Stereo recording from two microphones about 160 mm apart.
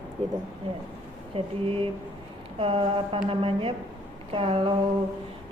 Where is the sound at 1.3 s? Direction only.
35° right (ahead or behind).